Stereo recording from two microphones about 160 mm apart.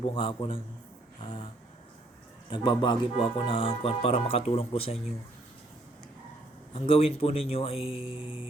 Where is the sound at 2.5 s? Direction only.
30° left (ahead or behind).